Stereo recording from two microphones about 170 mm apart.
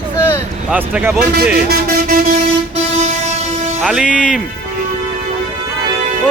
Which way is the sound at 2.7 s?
45° right (ahead or behind).